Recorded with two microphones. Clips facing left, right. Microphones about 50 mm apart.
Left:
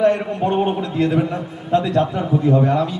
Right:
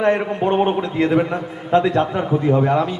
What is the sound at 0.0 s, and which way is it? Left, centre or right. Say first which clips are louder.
A man's voice: left 1 dB; right.